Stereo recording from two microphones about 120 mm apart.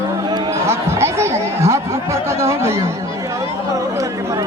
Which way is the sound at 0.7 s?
25° right (ahead or behind).